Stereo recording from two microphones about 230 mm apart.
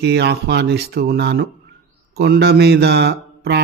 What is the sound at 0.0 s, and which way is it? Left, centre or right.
A man's voice, right.